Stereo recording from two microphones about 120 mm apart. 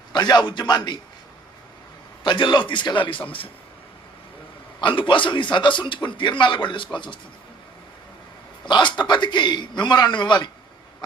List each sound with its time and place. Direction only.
0.1 s a man's voice: 35° left (ahead or behind)
2.2 s speech: 40° left (ahead or behind)
4.8 s a man's voice: 45° left (ahead or behind)
8.6 s a man's voice: 40° left (ahead or behind)